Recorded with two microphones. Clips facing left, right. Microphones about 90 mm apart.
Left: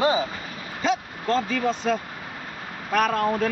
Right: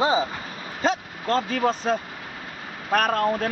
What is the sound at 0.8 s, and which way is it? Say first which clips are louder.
Speech: even; 40° right (ahead or behind).